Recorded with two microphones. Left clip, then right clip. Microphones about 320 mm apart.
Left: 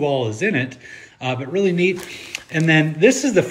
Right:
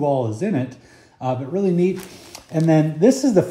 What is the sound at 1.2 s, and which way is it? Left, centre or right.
Speech, centre.